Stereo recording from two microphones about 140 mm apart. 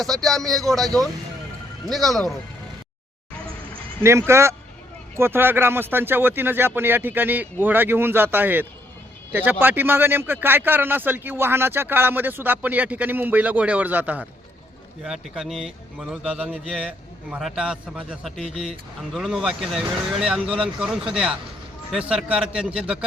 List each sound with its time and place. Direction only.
0.0 s a man's voice: centre (ahead or behind)
1.9 s a man's voice: centre (ahead or behind)
4.0 s a man's voice: 20° right (ahead or behind)